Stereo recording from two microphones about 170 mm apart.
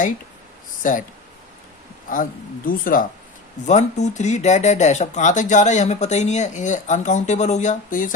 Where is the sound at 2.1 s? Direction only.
55° left (ahead or behind).